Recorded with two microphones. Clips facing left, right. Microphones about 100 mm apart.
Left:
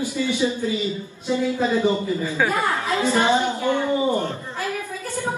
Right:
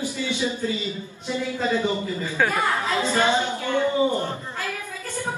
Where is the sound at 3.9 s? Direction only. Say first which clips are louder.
Left 1 dB; 20° right (ahead or behind).